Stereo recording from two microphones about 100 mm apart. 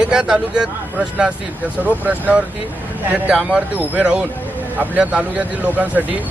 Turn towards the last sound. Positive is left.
turn(degrees=-15)  # may be behind; listen again after turning